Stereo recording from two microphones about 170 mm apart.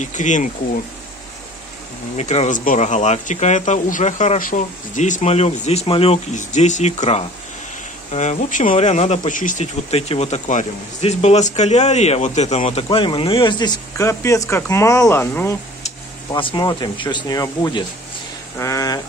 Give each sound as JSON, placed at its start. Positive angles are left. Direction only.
{"t": 0.0, "sound": "speech", "side_deg": 45}
{"t": 2.1, "sound": "speech", "side_deg": 40}
{"t": 16.3, "sound": "speech", "side_deg": 30}